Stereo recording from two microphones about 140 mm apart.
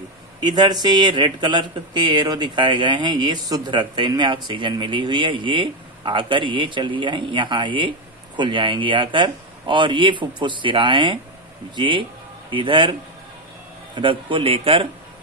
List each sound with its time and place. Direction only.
0.4 s speech: 30° right (ahead or behind)
13.9 s speech: 35° right (ahead or behind)